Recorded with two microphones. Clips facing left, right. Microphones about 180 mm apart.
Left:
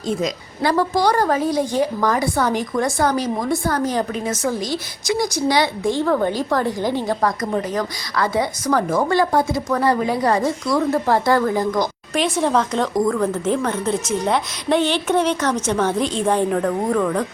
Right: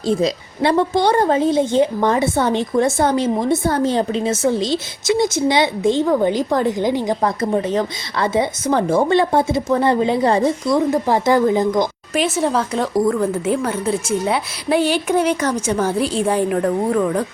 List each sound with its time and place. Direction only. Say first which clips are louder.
0.1 s a woman's voice: right 5 dB; 30° right (ahead or behind)
12.1 s speech: even; 5° right (ahead or behind)